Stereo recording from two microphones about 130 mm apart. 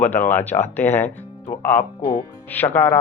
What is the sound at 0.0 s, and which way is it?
Speech, 15° left (ahead or behind).